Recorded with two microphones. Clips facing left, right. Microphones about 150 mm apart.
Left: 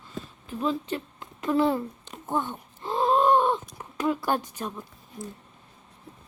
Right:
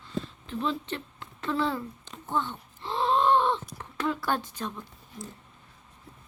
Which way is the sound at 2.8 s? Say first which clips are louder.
Left 3 dB; 45° left (ahead or behind).